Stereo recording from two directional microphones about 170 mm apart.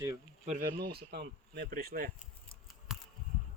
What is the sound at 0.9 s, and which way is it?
Speech, 70° right (ahead or behind).